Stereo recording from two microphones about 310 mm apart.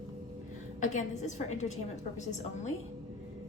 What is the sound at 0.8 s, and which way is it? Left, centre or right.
Speech, left.